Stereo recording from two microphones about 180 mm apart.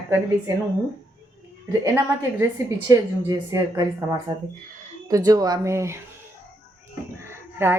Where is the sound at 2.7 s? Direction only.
20° right (ahead or behind).